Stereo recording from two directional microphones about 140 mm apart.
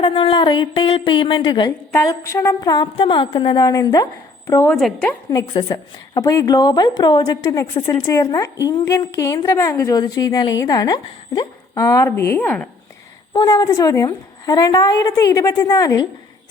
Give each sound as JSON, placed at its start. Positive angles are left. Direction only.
{"t": 0.0, "sound": "a woman's voice", "side_deg": 35}
{"t": 1.9, "sound": "a woman's voice", "side_deg": 20}
{"t": 4.7, "sound": "a woman's voice", "side_deg": 0}
{"t": 5.5, "sound": "a woman's voice", "side_deg": 30}